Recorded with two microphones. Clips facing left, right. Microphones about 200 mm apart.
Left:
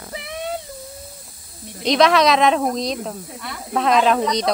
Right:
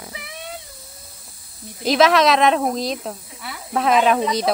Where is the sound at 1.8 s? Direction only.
5° right (ahead or behind).